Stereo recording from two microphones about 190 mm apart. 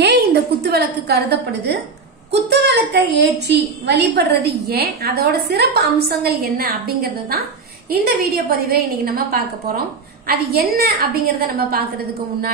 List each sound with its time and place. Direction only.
0.0 s a woman's voice: 60° right (ahead or behind)